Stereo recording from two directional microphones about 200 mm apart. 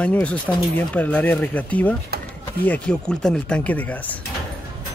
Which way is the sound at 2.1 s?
55° right (ahead or behind).